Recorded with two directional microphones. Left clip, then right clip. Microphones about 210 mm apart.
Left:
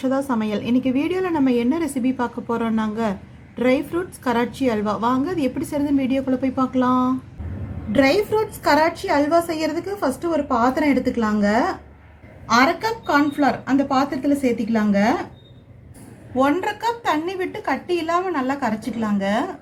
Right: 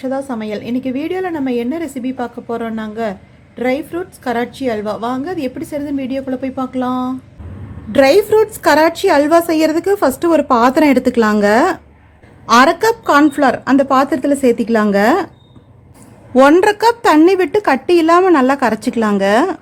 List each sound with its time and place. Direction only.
0.0 s a woman's voice: 5° right (ahead or behind)
7.9 s a woman's voice: 30° right (ahead or behind)
12.5 s a woman's voice: 45° right (ahead or behind)
16.4 s a woman's voice: 50° right (ahead or behind)